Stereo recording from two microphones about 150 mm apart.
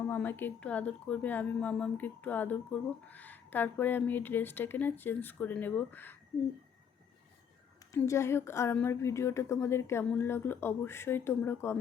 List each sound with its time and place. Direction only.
0.1 s a woman's voice: 15° left (ahead or behind)
7.9 s a woman's voice: 20° left (ahead or behind)